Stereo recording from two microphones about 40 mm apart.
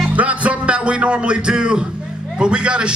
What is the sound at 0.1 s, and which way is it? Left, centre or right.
A man's voice, right.